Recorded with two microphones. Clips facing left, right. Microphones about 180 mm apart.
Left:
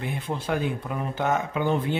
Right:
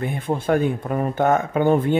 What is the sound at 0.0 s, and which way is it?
Speech, 50° right (ahead or behind).